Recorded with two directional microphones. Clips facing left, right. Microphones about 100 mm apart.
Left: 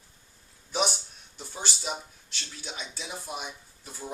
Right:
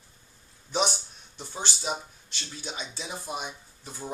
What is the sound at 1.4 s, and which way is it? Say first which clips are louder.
Speech: right 2 dB; 20° right (ahead or behind).